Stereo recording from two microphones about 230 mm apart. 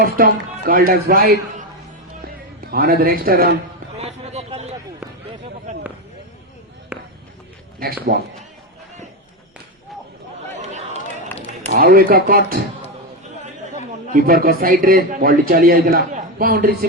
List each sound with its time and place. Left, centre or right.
0.0 s a man's voice: right
3.9 s a sound: right
6.9 s run: centre
8.1 s a man's voice: right
10.5 s a sound: right
11.7 s a man's voice: right
14.1 s a man's voice: right